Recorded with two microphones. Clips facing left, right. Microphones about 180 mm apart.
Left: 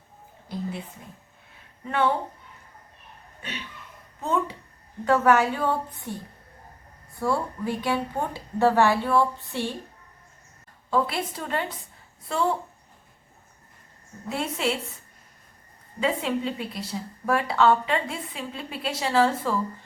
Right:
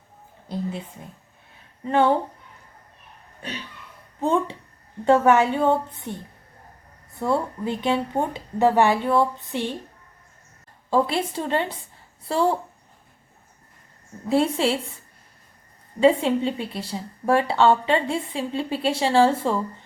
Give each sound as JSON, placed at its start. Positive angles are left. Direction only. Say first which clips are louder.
{"t": 1.8, "sound": "a woman's voice", "louder": "right 5 dB", "side_deg": -30}
{"t": 4.2, "sound": "a woman's voice", "louder": "right 4 dB", "side_deg": -30}
{"t": 7.2, "sound": "a woman's voice", "louder": "right 3 dB", "side_deg": -20}
{"t": 10.9, "sound": "a woman's voice", "louder": "right 4 dB", "side_deg": -25}
{"t": 14.3, "sound": "a woman's voice", "louder": "right 7 dB", "side_deg": -30}
{"t": 16.0, "sound": "a woman's voice", "louder": "right 8 dB", "side_deg": -30}